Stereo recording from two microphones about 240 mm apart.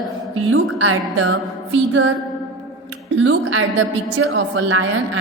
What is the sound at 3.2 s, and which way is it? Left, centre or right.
A woman's voice, right.